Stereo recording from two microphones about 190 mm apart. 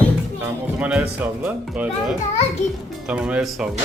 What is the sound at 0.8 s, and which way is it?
A man's voice, 5° right (ahead or behind).